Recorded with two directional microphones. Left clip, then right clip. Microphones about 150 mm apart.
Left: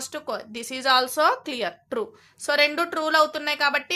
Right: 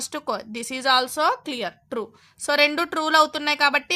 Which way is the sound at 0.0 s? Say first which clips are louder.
Right 3 dB; 45° right (ahead or behind).